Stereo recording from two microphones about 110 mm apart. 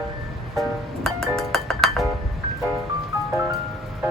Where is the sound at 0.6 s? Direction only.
5° left (ahead or behind).